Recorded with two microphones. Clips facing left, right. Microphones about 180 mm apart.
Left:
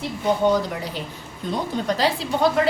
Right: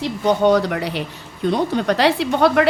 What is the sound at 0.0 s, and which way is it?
A woman's voice, 80° right.